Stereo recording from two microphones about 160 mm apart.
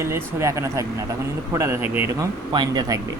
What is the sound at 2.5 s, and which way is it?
Speech, 25° right (ahead or behind).